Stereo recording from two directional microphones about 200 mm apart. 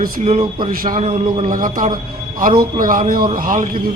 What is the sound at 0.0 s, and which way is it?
A man's voice, 40° right (ahead or behind).